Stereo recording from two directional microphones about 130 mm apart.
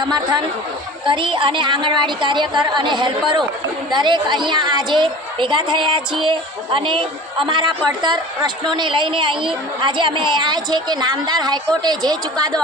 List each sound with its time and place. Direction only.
0.0 s a woman's voice: 35° right (ahead or behind)